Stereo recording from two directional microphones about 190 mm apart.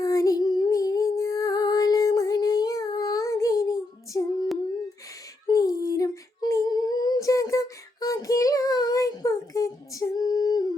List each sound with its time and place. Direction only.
0.0 s music: 15° left (ahead or behind)
5.5 s female singing: 20° left (ahead or behind)